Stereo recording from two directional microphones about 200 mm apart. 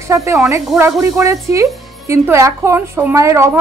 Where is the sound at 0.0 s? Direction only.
15° right (ahead or behind).